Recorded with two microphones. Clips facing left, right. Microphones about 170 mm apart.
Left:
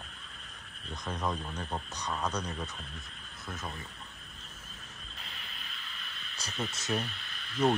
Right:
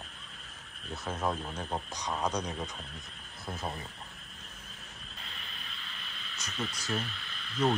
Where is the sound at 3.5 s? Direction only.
30° right (ahead or behind).